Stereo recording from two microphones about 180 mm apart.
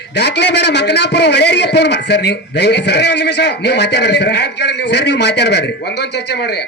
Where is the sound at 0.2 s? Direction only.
70° left (ahead or behind).